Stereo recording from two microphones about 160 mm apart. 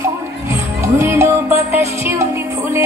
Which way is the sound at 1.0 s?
15° right (ahead or behind).